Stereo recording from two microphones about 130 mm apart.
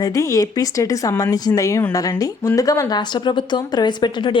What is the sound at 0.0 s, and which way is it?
A woman's voice, 25° left (ahead or behind).